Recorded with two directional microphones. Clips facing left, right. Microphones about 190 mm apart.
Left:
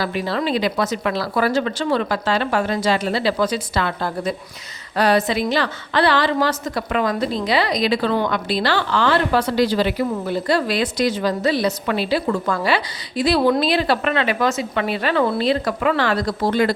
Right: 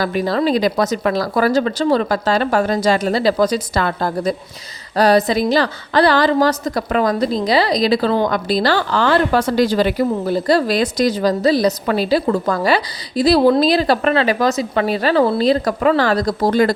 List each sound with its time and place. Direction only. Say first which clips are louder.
0.0 s a woman's voice: right 5 dB; 45° right (ahead or behind)